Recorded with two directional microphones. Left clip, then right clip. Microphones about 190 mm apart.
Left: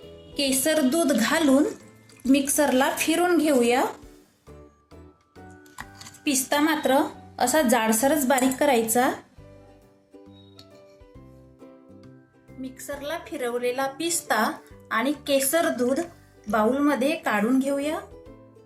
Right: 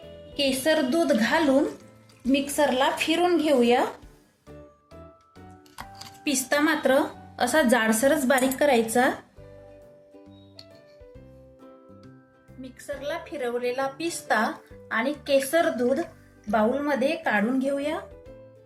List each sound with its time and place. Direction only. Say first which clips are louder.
0.3 s a woman's voice: even; 15° left (ahead or behind)
6.2 s a woman's voice: even; centre (ahead or behind)
12.6 s a woman's voice: even; 10° left (ahead or behind)